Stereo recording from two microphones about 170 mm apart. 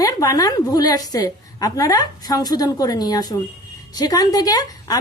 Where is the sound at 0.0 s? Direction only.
20° left (ahead or behind).